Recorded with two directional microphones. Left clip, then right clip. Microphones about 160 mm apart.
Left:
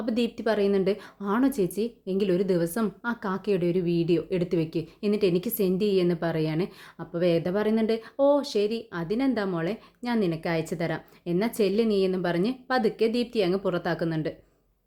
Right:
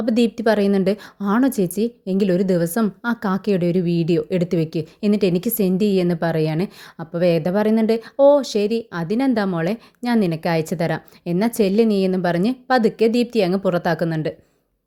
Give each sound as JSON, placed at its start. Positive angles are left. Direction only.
{"t": 0.0, "sound": "a woman's voice", "side_deg": -50}